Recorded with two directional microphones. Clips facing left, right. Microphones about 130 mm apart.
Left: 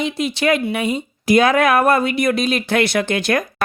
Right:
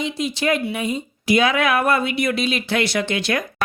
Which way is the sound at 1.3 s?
45° left (ahead or behind).